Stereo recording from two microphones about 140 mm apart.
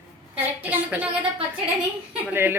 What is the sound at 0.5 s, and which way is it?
Speech, 10° right (ahead or behind).